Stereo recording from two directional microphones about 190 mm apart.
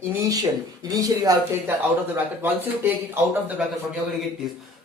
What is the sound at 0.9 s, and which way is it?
Speech, 20° right (ahead or behind).